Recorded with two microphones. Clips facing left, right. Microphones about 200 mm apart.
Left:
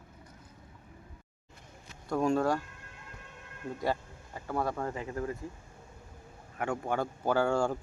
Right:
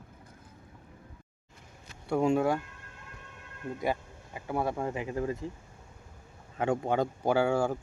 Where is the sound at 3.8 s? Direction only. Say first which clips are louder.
Right 1 dB; 15° right (ahead or behind).